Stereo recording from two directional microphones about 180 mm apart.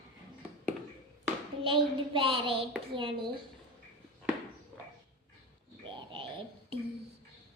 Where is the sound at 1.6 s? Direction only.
30° right (ahead or behind).